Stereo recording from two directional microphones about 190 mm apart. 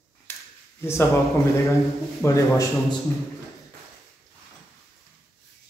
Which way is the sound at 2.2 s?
15° left (ahead or behind).